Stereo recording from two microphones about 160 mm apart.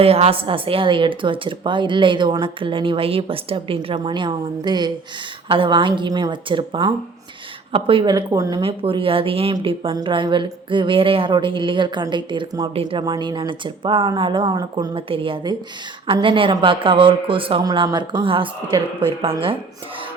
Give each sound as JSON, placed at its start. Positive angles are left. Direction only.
{"t": 0.0, "sound": "a woman's voice", "side_deg": -40}